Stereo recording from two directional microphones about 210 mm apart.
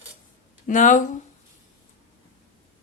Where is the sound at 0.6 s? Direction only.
35° left (ahead or behind).